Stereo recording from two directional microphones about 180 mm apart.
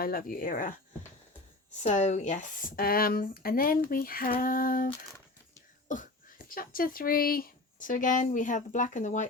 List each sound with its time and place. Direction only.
0.0 s speech: 55° left (ahead or behind)
1.8 s speech: 40° left (ahead or behind)
5.9 s speech: 45° left (ahead or behind)